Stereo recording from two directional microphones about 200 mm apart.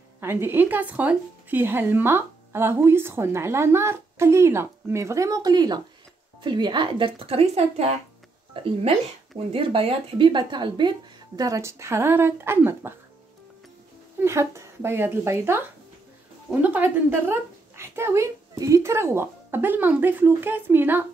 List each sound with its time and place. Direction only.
0.2 s a woman's voice: 10° right (ahead or behind)
14.2 s a woman's voice: 15° right (ahead or behind)